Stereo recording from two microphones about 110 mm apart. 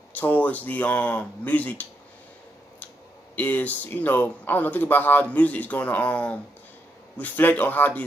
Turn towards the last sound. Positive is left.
turn(degrees=15)  # may be behind; listen again after turning